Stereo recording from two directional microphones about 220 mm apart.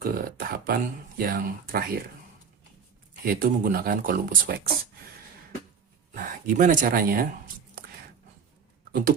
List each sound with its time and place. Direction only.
0.0 s speech: 40° right (ahead or behind)
3.2 s speech: 40° right (ahead or behind)
6.1 s speech: 35° right (ahead or behind)
8.9 s a sound: 45° right (ahead or behind)